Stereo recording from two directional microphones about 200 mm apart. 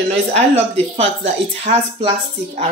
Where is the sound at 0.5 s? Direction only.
30° right (ahead or behind).